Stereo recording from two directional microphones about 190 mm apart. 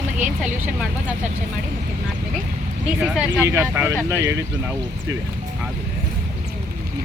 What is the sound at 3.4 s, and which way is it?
Speech, 10° right (ahead or behind).